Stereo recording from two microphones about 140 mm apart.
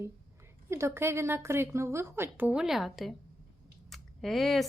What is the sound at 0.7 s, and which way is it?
A woman's voice, 20° right (ahead or behind).